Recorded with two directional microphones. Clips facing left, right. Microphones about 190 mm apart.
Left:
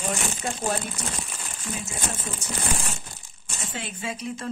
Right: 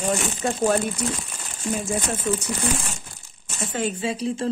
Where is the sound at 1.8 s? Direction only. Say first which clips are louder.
Right 7 dB; 50° right (ahead or behind).